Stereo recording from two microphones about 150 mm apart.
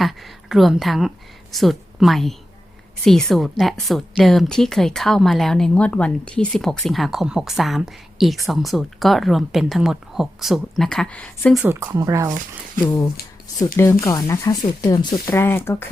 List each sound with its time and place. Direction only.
0.0 s a woman's voice: centre (ahead or behind)
11.7 s speech: 15° right (ahead or behind)
14.0 s speech: 20° left (ahead or behind)